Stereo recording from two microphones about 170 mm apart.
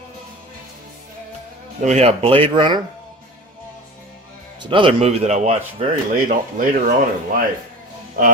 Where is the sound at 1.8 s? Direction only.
40° right (ahead or behind).